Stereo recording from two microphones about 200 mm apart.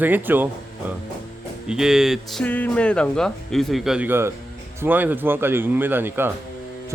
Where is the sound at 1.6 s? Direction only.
5° right (ahead or behind).